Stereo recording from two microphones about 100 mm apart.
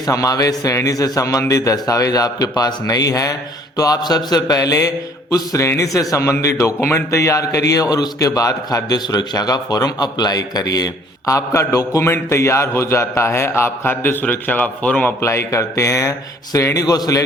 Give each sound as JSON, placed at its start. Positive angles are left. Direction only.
{"t": 0.0, "sound": "a man's voice", "side_deg": 35}
{"t": 15.2, "sound": "a man's voice", "side_deg": 25}